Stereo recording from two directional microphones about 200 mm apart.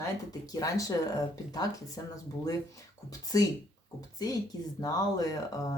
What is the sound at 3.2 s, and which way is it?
Speech, 15° left (ahead or behind).